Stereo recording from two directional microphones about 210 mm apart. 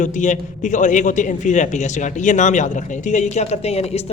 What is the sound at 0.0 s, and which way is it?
A man's voice, 35° left (ahead or behind).